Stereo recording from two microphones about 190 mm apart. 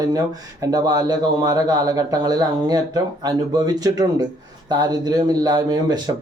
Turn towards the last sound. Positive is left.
turn(degrees=-20)  # may be behind; listen again after turning